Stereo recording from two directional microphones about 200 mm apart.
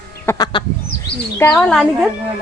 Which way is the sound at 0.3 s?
20° left (ahead or behind).